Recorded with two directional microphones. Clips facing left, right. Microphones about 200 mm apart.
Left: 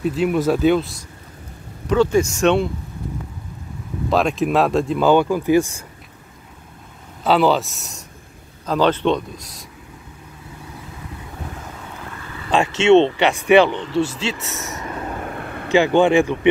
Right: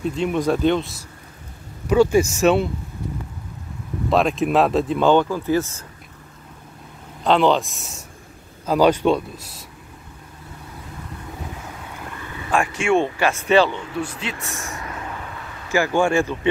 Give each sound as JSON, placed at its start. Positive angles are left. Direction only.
{"t": 0.0, "sound": "speech", "side_deg": 5}
{"t": 1.9, "sound": "speech", "side_deg": -10}
{"t": 4.1, "sound": "speech", "side_deg": 0}
{"t": 7.2, "sound": "speech", "side_deg": 5}
{"t": 8.6, "sound": "speech", "side_deg": -10}
{"t": 12.4, "sound": "speech", "side_deg": 25}
{"t": 13.9, "sound": "speech", "side_deg": 30}
{"t": 14.3, "sound": "speech", "side_deg": 0}
{"t": 14.7, "sound": "vehicle", "side_deg": 20}
{"t": 15.0, "sound": "vehicle", "side_deg": 45}
{"t": 15.7, "sound": "speech", "side_deg": 20}